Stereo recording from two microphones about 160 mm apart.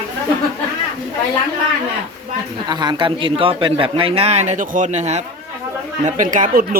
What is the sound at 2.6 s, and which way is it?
A man's voice, 25° right (ahead or behind).